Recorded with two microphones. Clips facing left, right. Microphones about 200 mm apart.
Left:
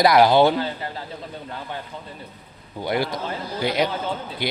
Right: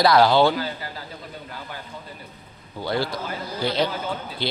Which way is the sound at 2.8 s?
20° left (ahead or behind).